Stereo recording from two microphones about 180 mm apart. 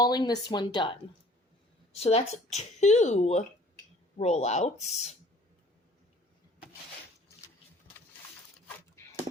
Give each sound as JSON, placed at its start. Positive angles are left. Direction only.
{"t": 0.0, "sound": "speech", "side_deg": 20}
{"t": 2.0, "sound": "a woman's voice", "side_deg": 35}